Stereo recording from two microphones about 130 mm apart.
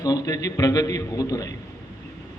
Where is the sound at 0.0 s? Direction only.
30° left (ahead or behind).